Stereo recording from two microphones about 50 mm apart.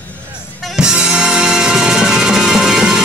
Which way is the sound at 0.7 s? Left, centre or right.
Centre.